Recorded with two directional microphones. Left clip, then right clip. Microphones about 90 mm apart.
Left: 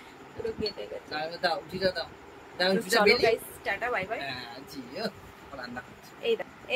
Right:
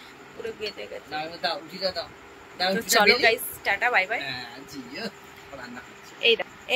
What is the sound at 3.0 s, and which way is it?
Speech, 15° left (ahead or behind).